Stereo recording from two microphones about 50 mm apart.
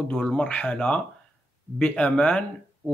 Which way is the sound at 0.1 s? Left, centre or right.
Left.